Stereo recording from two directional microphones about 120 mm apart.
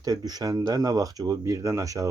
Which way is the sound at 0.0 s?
35° right (ahead or behind).